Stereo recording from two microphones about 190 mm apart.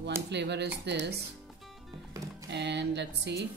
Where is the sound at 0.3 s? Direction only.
65° right (ahead or behind).